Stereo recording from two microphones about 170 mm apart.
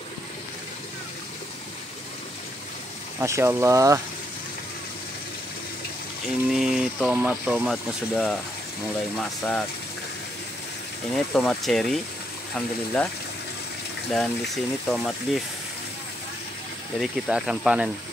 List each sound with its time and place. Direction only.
3.2 s speech: 15° right (ahead or behind)
6.5 s speech: 5° right (ahead or behind)
11.1 s speech: centre (ahead or behind)
14.1 s speech: 5° left (ahead or behind)
17.0 s speech: 5° right (ahead or behind)